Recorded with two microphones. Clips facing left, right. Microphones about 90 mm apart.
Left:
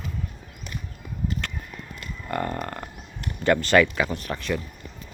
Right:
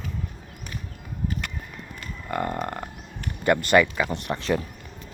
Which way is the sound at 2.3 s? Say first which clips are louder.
Right 1 dB; 15° right (ahead or behind).